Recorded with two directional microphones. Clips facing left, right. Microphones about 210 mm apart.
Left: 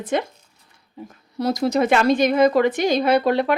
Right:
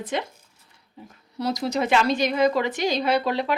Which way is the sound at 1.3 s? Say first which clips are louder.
Left 5 dB; 50° left (ahead or behind).